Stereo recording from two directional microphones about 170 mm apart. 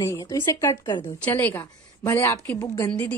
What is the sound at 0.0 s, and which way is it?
A woman's voice, 20° left (ahead or behind).